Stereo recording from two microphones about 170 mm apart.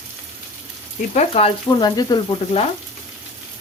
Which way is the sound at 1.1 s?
35° left (ahead or behind).